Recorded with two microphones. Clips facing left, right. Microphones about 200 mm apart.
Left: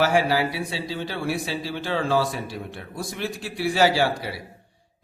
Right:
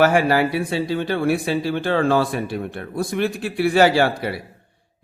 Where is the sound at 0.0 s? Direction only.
55° right (ahead or behind).